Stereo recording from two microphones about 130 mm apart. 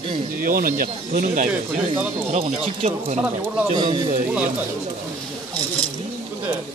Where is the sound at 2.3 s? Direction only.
55° right (ahead or behind).